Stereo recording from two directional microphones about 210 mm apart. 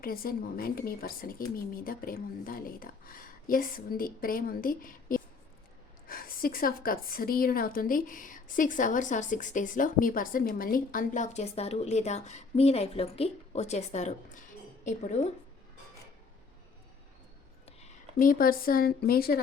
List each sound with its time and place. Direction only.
0.0 s a woman's voice: 45° left (ahead or behind)
17.7 s speech: 35° left (ahead or behind)